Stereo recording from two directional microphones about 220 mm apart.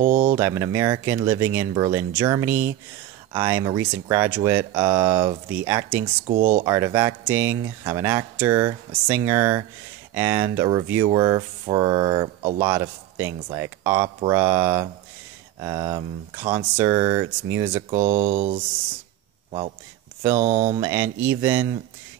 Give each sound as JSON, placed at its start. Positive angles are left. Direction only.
{"t": 0.0, "sound": "a sound", "side_deg": -35}
{"t": 0.4, "sound": "speech", "side_deg": -10}
{"t": 6.2, "sound": "speech", "side_deg": -35}
{"t": 6.6, "sound": "speech", "side_deg": -15}
{"t": 17.8, "sound": "speech", "side_deg": -35}
{"t": 20.3, "sound": "speech", "side_deg": -35}
{"t": 20.8, "sound": "speech", "side_deg": -10}